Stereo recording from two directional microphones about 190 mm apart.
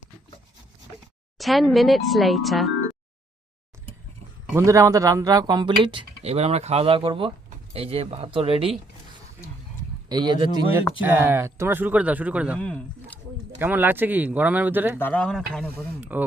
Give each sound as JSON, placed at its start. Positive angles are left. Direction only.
{"t": 1.4, "sound": "speech", "side_deg": 0}
{"t": 4.5, "sound": "speech", "side_deg": -15}
{"t": 10.1, "sound": "speech", "side_deg": -25}
{"t": 11.0, "sound": "speech", "side_deg": -10}
{"t": 12.5, "sound": "speech", "side_deg": 5}
{"t": 13.6, "sound": "speech", "side_deg": -10}
{"t": 14.9, "sound": "speech", "side_deg": 10}
{"t": 16.0, "sound": "speech", "side_deg": -10}